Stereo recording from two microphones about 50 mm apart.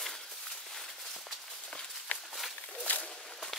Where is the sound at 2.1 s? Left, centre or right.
Left.